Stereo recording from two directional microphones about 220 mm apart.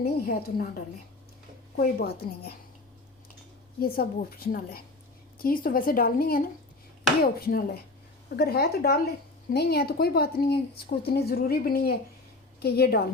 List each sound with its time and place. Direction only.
0.0 s speech: 45° left (ahead or behind)
3.8 s a woman's voice: 45° left (ahead or behind)